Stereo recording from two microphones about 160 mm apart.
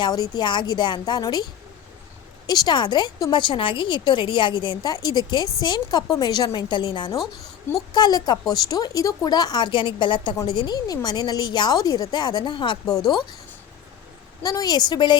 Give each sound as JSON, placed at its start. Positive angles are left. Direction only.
{"t": 0.0, "sound": "speech", "side_deg": 25}
{"t": 2.5, "sound": "speech", "side_deg": 25}
{"t": 14.4, "sound": "speech", "side_deg": 25}